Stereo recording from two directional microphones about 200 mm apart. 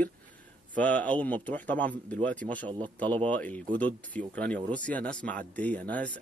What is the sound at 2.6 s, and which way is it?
Speech, 25° right (ahead or behind).